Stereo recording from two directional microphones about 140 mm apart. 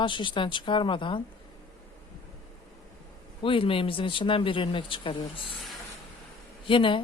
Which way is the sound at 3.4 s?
40° left (ahead or behind).